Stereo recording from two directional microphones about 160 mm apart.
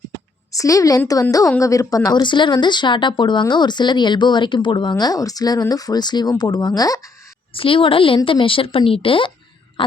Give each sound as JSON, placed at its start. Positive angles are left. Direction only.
{"t": 0.5, "sound": "speech", "side_deg": 20}
{"t": 7.5, "sound": "a woman's voice", "side_deg": 35}